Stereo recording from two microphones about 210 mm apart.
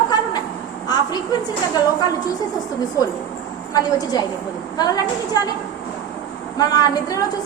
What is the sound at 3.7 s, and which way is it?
A woman's voice, 20° left (ahead or behind).